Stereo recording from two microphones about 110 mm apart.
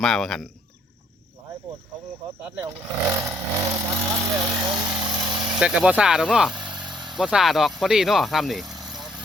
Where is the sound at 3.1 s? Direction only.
25° right (ahead or behind).